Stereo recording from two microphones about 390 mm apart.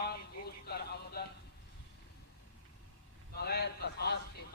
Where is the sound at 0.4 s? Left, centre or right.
Left.